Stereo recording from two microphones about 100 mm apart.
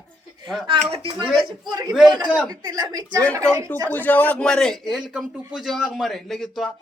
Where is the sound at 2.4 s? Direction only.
40° right (ahead or behind).